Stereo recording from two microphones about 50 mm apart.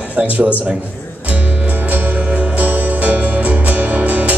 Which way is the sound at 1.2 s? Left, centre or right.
Right.